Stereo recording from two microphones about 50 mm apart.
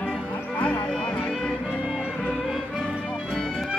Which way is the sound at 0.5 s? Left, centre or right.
Left.